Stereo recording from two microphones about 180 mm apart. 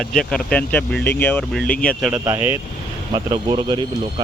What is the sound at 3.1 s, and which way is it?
Speech, 30° right (ahead or behind).